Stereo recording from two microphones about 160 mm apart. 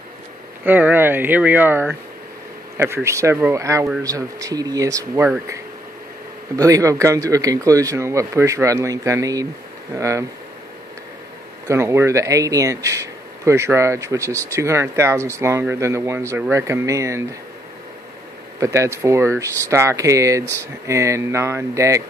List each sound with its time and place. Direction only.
0.7 s speech: 10° right (ahead or behind)
11.6 s speech: 20° right (ahead or behind)
18.6 s speech: 20° right (ahead or behind)